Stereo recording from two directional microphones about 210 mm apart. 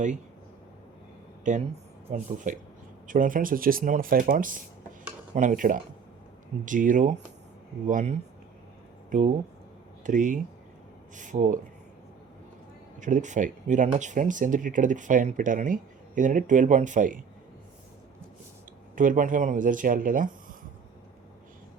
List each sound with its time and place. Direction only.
1.5 s speech: 35° right (ahead or behind)
13.0 s speech: 35° right (ahead or behind)
18.9 s speech: 40° right (ahead or behind)